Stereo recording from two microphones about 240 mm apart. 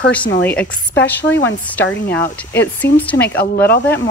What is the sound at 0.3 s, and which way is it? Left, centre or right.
Speech, left.